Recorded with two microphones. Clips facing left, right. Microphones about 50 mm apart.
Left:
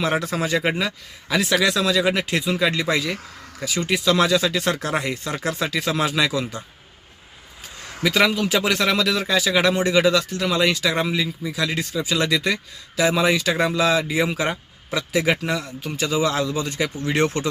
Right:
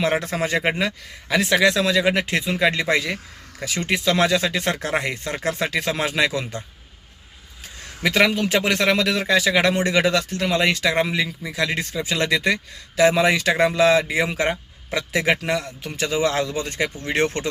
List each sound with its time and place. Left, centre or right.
0.0 s speech: right
8.0 s a man's voice: right